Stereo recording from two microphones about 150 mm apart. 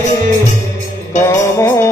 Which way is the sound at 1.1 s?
20° left (ahead or behind).